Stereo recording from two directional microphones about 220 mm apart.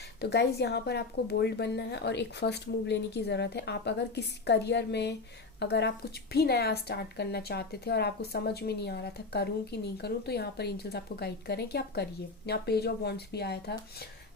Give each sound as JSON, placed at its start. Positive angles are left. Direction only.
{"t": 0.0, "sound": "a woman's voice", "side_deg": 50}